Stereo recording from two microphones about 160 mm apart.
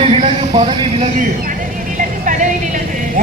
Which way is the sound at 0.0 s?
40° right (ahead or behind).